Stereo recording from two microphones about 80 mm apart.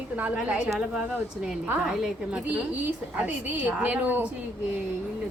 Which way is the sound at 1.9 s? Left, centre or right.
Centre.